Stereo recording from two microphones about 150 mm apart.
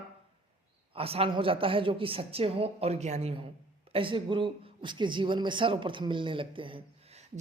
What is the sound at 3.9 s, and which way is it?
A man's voice, 35° right (ahead or behind).